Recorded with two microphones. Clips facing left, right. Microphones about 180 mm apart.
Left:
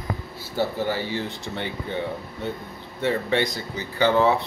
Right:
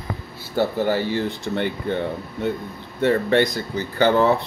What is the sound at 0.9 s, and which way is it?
Speech, 55° right (ahead or behind).